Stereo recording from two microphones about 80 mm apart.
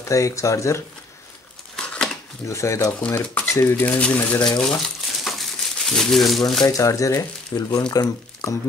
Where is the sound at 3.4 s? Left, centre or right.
Left.